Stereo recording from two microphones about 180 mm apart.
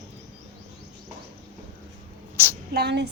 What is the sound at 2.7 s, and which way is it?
Speech, 65° right (ahead or behind).